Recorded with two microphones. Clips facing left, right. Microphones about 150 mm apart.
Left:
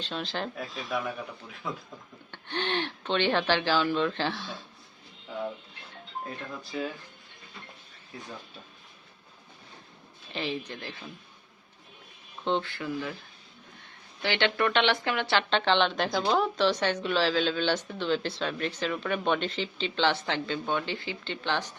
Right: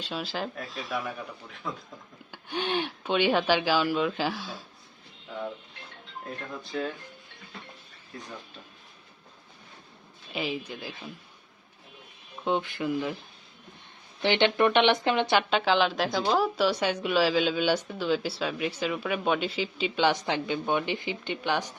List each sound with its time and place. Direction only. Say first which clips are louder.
0.0 s speech: right 1 dB; 5° right (ahead or behind)
2.3 s speech: right 2 dB; 10° right (ahead or behind)
5.3 s speech: left 1 dB; centre (ahead or behind)
8.1 s speech: right 1 dB; 5° left (ahead or behind)
10.3 s speech: right 1 dB; 10° right (ahead or behind)
12.5 s speech: right 2 dB; 15° right (ahead or behind)